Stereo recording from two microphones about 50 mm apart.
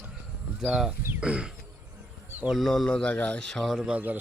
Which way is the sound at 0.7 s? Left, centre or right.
Centre.